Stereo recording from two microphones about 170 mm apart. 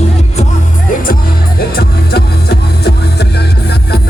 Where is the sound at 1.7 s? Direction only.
65° left (ahead or behind).